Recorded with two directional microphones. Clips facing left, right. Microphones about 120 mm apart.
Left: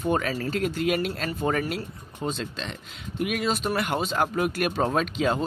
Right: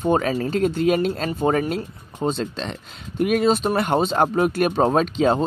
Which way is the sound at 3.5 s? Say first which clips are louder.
Right 7 dB; 30° right (ahead or behind).